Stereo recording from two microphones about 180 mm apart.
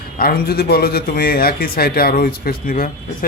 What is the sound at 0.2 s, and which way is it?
A man's voice, 60° left (ahead or behind).